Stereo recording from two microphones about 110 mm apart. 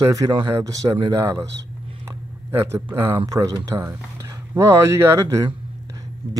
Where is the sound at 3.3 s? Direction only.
30° right (ahead or behind).